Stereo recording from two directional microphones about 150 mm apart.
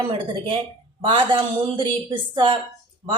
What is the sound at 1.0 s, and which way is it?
Speech, 35° right (ahead or behind).